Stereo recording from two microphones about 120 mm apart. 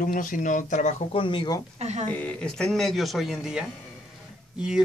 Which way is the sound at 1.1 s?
45° left (ahead or behind).